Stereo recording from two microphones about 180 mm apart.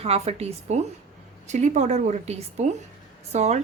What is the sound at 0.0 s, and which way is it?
A woman's voice, 35° right (ahead or behind).